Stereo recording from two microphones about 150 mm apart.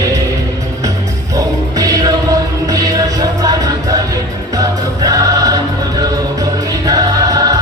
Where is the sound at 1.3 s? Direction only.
25° right (ahead or behind).